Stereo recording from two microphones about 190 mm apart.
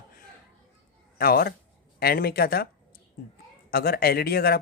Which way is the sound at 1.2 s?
50° left (ahead or behind).